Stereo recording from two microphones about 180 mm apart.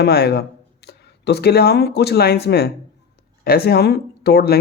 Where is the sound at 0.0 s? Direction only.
65° left (ahead or behind).